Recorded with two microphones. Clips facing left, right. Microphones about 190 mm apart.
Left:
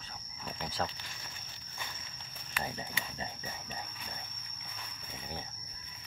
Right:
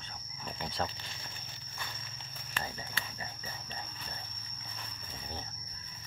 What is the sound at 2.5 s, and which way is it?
Speech, 15° left (ahead or behind).